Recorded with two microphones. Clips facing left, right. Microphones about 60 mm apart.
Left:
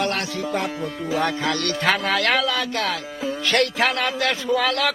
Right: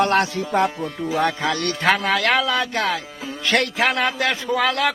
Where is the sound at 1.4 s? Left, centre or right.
Centre.